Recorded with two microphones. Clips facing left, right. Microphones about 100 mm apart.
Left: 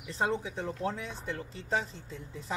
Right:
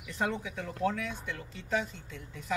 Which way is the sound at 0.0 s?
30° left (ahead or behind).